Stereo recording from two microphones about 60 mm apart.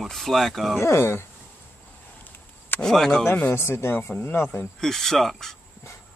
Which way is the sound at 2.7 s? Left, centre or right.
Centre.